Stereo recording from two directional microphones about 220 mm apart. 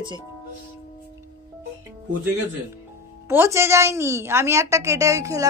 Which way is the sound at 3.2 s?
10° right (ahead or behind).